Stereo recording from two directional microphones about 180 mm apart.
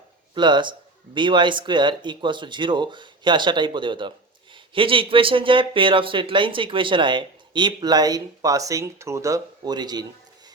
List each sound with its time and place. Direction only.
0.3 s speech: 25° right (ahead or behind)